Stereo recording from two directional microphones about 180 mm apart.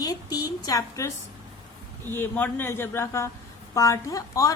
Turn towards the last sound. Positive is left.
turn(degrees=20)  # may be behind; listen again after turning